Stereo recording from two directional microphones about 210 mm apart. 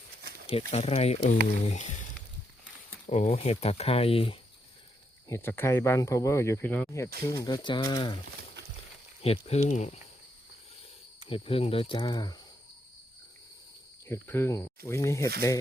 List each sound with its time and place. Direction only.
0.7 s speech: 30° left (ahead or behind)
3.1 s speech: 30° left (ahead or behind)
5.3 s speech: 10° left (ahead or behind)
9.2 s speech: 30° left (ahead or behind)
11.3 s speech: 25° left (ahead or behind)
14.1 s speech: 10° left (ahead or behind)